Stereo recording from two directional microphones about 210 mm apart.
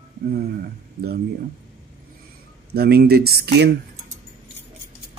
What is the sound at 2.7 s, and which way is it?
Speech, 50° right (ahead or behind).